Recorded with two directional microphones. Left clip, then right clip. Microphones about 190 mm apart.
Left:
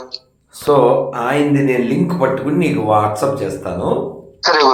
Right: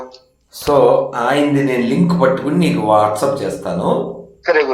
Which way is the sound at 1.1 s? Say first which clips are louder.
Right 1 dB; centre (ahead or behind).